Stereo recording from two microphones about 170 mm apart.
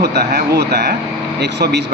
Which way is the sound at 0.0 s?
80° right.